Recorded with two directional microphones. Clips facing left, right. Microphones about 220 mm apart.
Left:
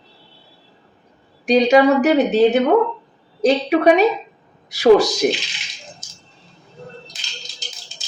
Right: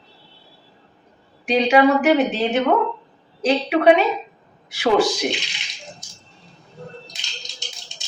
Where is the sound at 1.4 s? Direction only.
40° left (ahead or behind).